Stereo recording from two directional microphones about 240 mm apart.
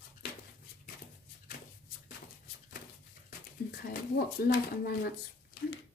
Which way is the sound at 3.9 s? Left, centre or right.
Left.